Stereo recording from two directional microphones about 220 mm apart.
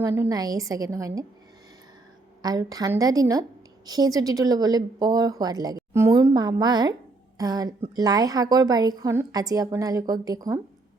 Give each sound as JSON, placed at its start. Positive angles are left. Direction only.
{"t": 0.0, "sound": "a woman's voice", "side_deg": -15}
{"t": 2.4, "sound": "a woman's voice", "side_deg": -15}